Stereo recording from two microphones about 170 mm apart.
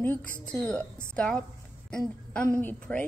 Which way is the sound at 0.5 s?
5° left (ahead or behind).